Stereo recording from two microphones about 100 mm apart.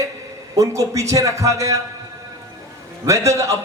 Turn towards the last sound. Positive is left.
turn(degrees=-30)  # may be behind; listen again after turning